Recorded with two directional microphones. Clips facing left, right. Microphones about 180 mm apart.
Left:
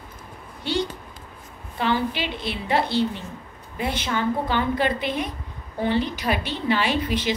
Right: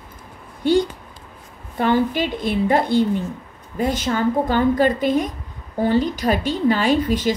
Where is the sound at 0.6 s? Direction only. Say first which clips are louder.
Right 8 dB; 50° right (ahead or behind).